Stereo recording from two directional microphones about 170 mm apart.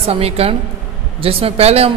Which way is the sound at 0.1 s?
35° right (ahead or behind).